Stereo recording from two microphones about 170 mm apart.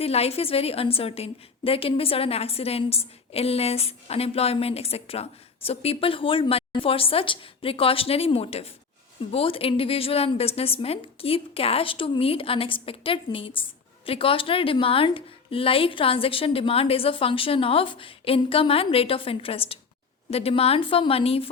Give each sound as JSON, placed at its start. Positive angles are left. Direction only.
{"t": 0.0, "sound": "a woman's voice", "side_deg": 35}